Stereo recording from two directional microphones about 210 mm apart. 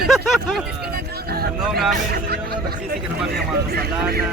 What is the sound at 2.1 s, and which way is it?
Speech, 45° right (ahead or behind).